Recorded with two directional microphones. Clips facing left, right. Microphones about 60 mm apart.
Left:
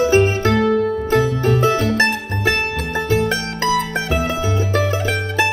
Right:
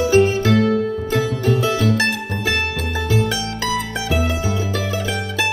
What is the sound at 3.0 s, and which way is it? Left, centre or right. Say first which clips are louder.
Mandolin: left 2 dB; left.